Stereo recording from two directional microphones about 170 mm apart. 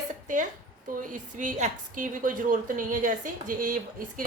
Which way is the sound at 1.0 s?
50° right (ahead or behind).